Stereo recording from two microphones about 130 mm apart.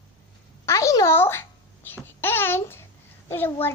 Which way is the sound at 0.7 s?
25° left (ahead or behind).